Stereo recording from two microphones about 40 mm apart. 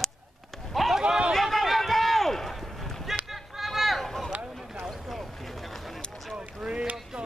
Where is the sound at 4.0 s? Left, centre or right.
Centre.